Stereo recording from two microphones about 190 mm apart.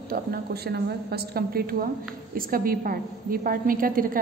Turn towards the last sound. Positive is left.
turn(degrees=-45)  # may be behind; listen again after turning